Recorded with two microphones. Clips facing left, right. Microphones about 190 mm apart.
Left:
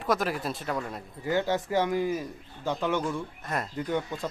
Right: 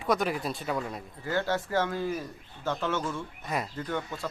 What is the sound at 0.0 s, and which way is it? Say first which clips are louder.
Speech: even; centre (ahead or behind).